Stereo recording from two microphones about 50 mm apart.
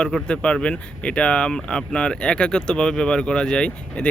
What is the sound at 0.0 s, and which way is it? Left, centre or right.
Speech, centre.